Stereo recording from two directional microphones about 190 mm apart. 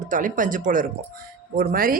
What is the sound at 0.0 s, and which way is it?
Speech, 45° right (ahead or behind).